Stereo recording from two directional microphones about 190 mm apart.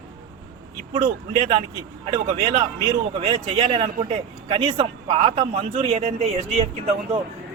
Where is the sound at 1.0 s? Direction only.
25° right (ahead or behind).